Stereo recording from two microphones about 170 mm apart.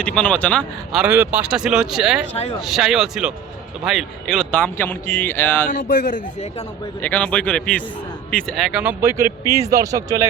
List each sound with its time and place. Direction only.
0.0 s speech: 5° left (ahead or behind)
0.9 s speech: 10° right (ahead or behind); by 5.6 s 10° left (ahead or behind)
5.6 s a man's voice: 60° left (ahead or behind)
7.0 s speech: 10° left (ahead or behind); by 10.2 s 20° right (ahead or behind)